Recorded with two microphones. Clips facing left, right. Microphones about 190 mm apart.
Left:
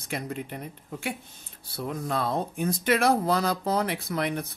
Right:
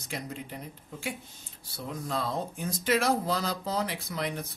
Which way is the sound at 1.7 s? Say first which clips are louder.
Left 4 dB; 55° left (ahead or behind).